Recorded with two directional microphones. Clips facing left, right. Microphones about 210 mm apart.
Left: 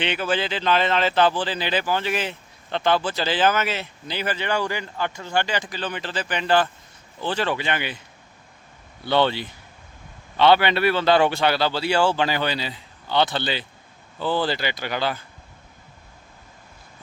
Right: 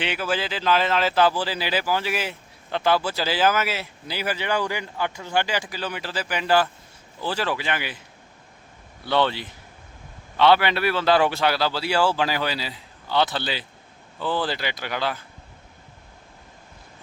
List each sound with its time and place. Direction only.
0.0 s a man's voice: 5° right (ahead or behind)
9.0 s a man's voice: centre (ahead or behind)